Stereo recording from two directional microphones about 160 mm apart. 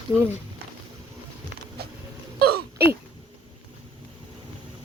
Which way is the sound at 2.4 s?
75° right (ahead or behind).